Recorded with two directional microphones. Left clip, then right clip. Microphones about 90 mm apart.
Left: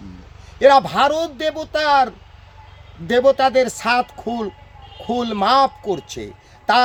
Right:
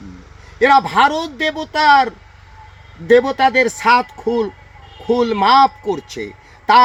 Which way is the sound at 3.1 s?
30° left (ahead or behind).